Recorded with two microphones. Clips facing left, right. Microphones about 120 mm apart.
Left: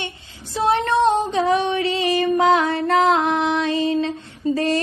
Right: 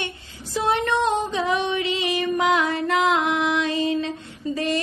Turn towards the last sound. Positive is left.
turn(degrees=35)  # may be behind; listen again after turning